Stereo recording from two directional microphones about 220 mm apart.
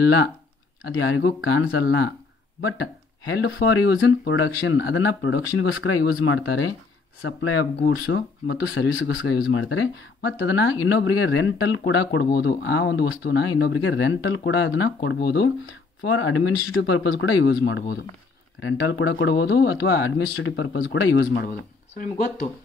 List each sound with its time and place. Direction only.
0.8 s speech: 65° left (ahead or behind)
3.3 s speech: 60° left (ahead or behind)
7.8 s speech: 60° left (ahead or behind)
16.1 s speech: 65° left (ahead or behind)
21.9 s speech: 35° left (ahead or behind)